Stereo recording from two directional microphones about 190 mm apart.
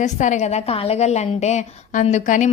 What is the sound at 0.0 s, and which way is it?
A woman's voice, 40° left (ahead or behind).